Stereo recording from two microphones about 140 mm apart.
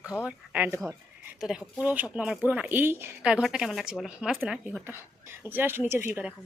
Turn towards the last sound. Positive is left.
turn(degrees=-15)  # may be behind; listen again after turning